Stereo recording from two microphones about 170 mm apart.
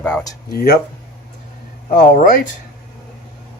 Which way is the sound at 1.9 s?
55° left (ahead or behind).